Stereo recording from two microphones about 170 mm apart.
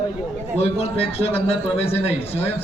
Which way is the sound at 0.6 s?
35° left (ahead or behind).